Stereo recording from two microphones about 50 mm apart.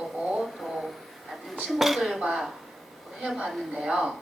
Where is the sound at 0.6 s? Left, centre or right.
Centre.